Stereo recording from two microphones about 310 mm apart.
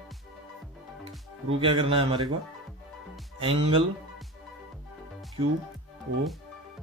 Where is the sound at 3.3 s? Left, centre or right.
Centre.